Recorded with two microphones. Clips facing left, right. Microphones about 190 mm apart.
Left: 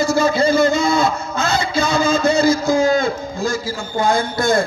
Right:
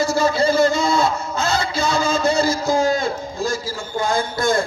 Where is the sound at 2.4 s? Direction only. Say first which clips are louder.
Left 3 dB; 40° right (ahead or behind).